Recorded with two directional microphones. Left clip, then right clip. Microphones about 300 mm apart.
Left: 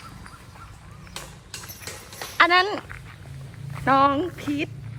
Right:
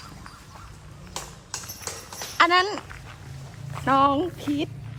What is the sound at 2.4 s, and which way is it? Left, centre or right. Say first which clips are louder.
Speech: left 1 dB; centre.